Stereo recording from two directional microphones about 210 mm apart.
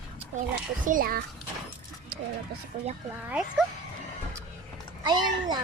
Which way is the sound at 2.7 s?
35° right (ahead or behind).